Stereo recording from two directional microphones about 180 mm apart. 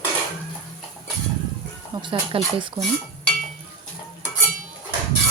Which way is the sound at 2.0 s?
30° right (ahead or behind).